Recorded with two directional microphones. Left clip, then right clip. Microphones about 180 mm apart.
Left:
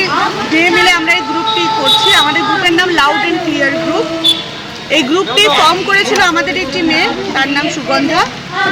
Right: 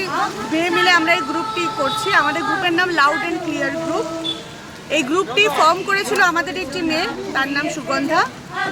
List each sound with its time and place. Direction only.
0.5 s speech: 15° right (ahead or behind)
4.9 s speech: 20° right (ahead or behind)